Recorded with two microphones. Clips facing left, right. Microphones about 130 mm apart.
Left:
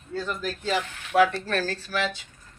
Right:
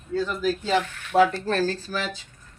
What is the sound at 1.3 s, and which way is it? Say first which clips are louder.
Speech: right 4 dB; 30° right (ahead or behind).